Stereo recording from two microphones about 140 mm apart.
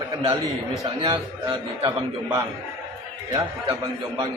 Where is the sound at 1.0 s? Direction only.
35° right (ahead or behind).